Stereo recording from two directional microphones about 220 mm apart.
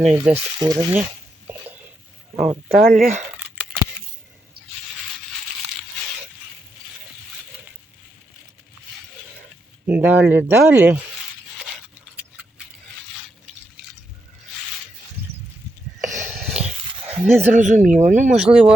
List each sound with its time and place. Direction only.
0.0 s speech: 5° right (ahead or behind)
0.6 s speech: 15° right (ahead or behind)
2.9 s speech: 35° right (ahead or behind)
3.3 s a sound: 5° right (ahead or behind)
9.8 s speech: 10° right (ahead or behind)
16.0 s a sound: 35° right (ahead or behind)
16.6 s dog: 5° right (ahead or behind)
17.1 s speech: 30° right (ahead or behind)
18.3 s speech: 5° right (ahead or behind)